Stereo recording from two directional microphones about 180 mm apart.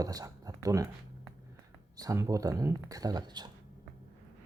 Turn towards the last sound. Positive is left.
turn(degrees=-25)  # may be behind; listen again after turning